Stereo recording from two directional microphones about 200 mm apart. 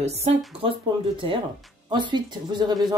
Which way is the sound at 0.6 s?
25° right (ahead or behind).